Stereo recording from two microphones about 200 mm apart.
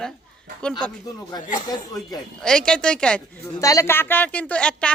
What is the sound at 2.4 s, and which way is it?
Speech, 5° left (ahead or behind).